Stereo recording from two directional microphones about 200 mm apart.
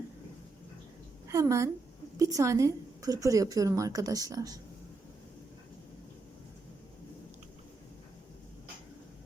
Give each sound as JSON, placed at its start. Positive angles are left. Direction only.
{"t": 1.3, "sound": "a woman's voice", "side_deg": -15}